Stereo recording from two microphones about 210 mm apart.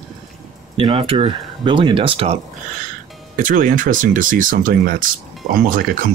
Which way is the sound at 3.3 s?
40° right (ahead or behind).